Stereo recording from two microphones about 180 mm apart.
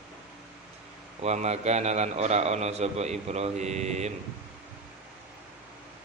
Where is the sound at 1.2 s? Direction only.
35° right (ahead or behind).